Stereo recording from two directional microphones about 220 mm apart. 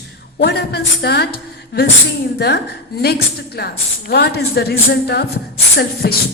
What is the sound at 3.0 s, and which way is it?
Speech, 45° left (ahead or behind).